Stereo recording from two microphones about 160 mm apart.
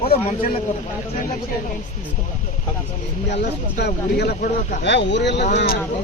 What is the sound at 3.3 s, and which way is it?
Speech, 90° left.